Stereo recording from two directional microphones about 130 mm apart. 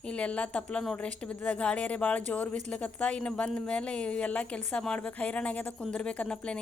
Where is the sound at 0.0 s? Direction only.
10° left (ahead or behind).